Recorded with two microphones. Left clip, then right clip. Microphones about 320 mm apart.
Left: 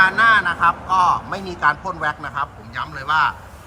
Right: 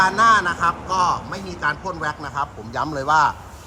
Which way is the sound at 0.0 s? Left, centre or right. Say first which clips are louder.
Left 1 dB; centre.